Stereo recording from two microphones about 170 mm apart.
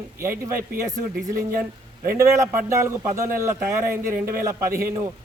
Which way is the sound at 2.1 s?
15° right (ahead or behind).